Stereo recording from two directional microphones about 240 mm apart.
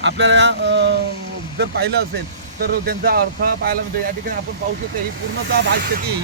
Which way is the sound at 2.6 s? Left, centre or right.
Right.